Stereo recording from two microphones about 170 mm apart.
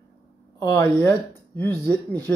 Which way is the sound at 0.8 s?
10° left (ahead or behind).